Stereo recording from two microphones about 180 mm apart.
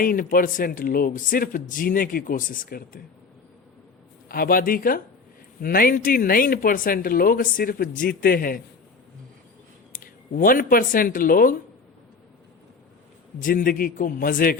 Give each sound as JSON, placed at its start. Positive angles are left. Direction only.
{"t": 0.0, "sound": "speech", "side_deg": 50}
{"t": 4.3, "sound": "speech", "side_deg": 55}
{"t": 9.9, "sound": "speech", "side_deg": 50}
{"t": 13.4, "sound": "speech", "side_deg": 50}